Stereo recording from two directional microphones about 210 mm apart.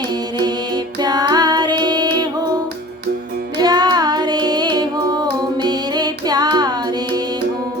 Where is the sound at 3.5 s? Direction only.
20° right (ahead or behind).